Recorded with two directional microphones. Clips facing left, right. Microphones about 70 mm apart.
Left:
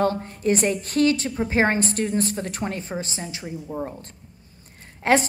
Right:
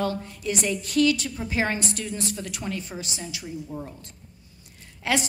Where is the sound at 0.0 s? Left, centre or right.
Left.